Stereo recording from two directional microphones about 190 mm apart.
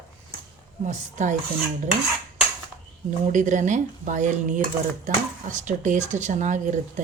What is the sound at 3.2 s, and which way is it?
Speech, 40° right (ahead or behind).